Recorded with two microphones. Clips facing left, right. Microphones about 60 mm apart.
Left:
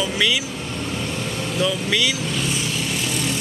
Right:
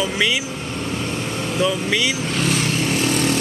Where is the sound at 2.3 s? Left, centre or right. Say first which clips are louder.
Right 4 dB; right.